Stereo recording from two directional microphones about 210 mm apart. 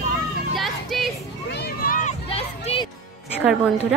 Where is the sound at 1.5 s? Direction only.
50° left (ahead or behind); by 2.9 s 25° left (ahead or behind).